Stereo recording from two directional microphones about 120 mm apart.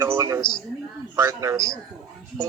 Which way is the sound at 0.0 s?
25° right (ahead or behind).